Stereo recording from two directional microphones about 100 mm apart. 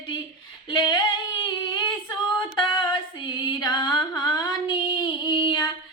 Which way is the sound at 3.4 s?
45° left (ahead or behind).